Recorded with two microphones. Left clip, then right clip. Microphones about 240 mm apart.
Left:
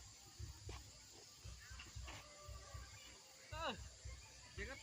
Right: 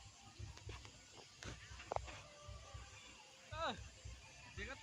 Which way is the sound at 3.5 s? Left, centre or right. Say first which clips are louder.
Right 2 dB; centre.